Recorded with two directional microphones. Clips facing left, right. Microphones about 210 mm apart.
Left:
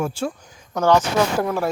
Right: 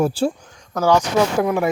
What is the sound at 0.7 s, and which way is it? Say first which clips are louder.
Speech: even; 10° right (ahead or behind).